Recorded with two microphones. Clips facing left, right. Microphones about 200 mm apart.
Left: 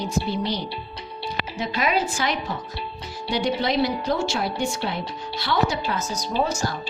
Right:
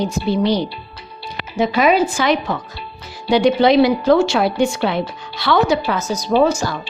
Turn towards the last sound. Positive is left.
turn(degrees=-90)